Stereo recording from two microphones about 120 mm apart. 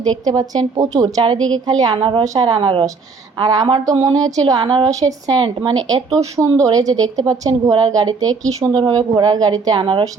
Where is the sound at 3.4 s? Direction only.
35° right (ahead or behind).